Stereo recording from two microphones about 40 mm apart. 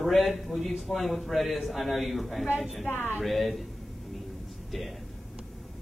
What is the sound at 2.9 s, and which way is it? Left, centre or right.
Speech, left.